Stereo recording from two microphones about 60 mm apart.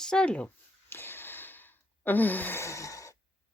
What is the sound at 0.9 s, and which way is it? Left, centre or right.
Sigh, left.